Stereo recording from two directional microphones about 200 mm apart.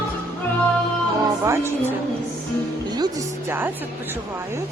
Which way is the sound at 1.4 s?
10° right (ahead or behind).